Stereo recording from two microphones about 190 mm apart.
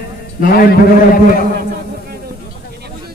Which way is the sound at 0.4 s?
50° left (ahead or behind).